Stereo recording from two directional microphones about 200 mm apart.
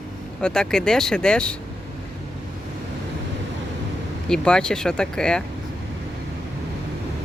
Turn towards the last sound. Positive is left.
turn(degrees=5)  # may be behind; listen again after turning